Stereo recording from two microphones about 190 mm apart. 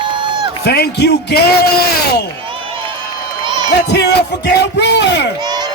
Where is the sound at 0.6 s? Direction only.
60° left (ahead or behind).